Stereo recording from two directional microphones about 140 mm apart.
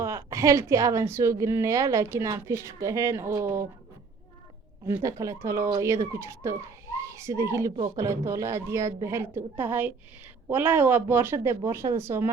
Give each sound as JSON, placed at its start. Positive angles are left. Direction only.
{"t": 0.0, "sound": "a child's voice", "side_deg": -20}
{"t": 4.9, "sound": "a child's voice", "side_deg": -20}